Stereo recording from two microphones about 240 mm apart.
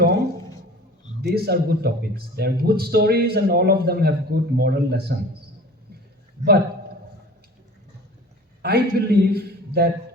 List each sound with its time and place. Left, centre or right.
1.2 s a man's voice: right
6.4 s a man's voice: right
8.6 s a man's voice: right